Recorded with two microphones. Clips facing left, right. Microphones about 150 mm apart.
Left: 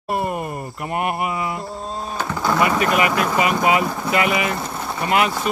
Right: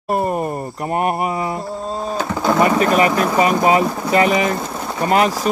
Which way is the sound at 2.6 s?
35° right (ahead or behind).